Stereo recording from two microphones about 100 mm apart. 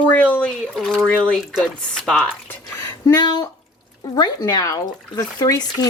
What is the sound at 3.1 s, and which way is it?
A woman's voice, 40° left (ahead or behind).